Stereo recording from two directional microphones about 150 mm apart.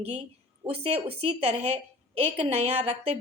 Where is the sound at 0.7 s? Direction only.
40° right (ahead or behind).